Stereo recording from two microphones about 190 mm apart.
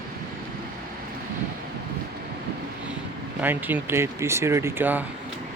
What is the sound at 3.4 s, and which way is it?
Speech, 10° right (ahead or behind).